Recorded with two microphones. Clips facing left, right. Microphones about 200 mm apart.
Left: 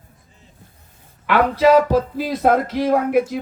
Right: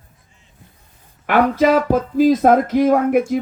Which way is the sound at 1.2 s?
50° right (ahead or behind).